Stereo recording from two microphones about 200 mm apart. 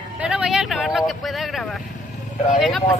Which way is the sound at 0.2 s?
5° right (ahead or behind).